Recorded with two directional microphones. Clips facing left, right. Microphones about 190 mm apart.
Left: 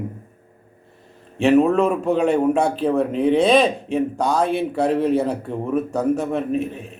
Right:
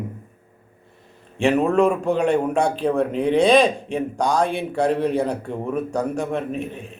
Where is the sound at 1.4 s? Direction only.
5° left (ahead or behind).